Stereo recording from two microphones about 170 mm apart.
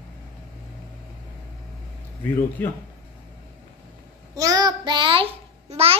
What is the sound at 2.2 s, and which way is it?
Speech, 10° left (ahead or behind).